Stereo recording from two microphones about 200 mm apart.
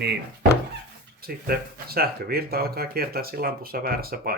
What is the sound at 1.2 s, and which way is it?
Speech, 50° right (ahead or behind).